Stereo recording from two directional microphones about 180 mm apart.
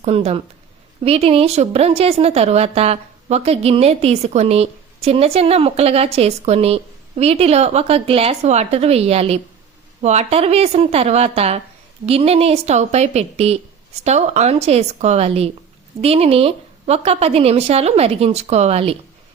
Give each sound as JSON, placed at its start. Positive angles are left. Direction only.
{"t": 0.0, "sound": "a woman's voice", "side_deg": -35}